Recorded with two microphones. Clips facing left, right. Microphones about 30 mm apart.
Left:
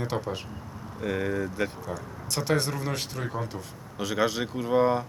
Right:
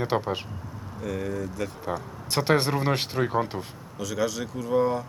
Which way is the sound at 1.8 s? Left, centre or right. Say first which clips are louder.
Right 4 dB; right.